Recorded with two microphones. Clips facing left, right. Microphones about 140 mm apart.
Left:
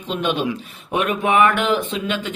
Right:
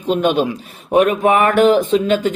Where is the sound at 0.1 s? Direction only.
45° right (ahead or behind).